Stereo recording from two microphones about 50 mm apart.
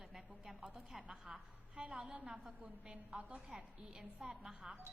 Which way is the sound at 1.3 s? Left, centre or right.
Centre.